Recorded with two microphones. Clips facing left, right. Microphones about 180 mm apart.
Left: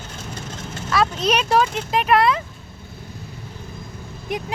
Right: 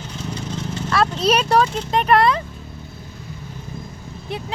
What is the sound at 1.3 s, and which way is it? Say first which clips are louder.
Speech: right 3 dB; centre (ahead or behind).